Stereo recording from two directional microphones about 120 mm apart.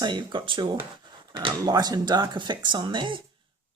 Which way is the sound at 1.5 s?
30° right (ahead or behind).